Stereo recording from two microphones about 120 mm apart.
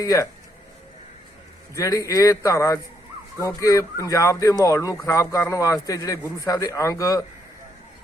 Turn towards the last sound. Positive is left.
turn(degrees=30)  # may be behind; listen again after turning